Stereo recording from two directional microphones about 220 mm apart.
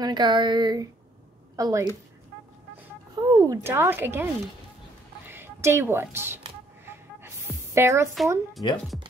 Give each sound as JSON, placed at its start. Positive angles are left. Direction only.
{"t": 0.0, "sound": "a sound", "side_deg": -20}
{"t": 1.6, "sound": "speech", "side_deg": -15}
{"t": 3.2, "sound": "speech", "side_deg": -15}
{"t": 5.3, "sound": "a woman's voice", "side_deg": -10}
{"t": 6.9, "sound": "a sound", "side_deg": -10}
{"t": 8.6, "sound": "speech", "side_deg": 20}